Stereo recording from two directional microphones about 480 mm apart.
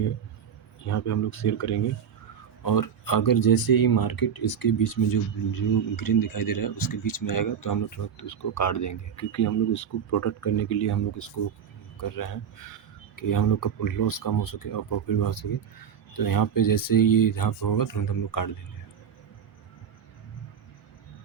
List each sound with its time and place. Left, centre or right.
0.9 s speech: left